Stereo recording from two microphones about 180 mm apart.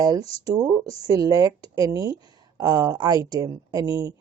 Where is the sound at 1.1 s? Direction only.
20° right (ahead or behind).